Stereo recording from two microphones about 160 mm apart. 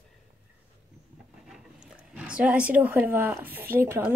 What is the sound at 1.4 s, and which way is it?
Speech, 5° right (ahead or behind).